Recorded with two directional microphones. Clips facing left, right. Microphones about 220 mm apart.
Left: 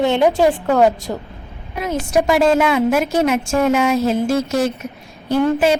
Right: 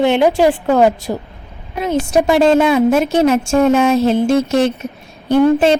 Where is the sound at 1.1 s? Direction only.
10° right (ahead or behind).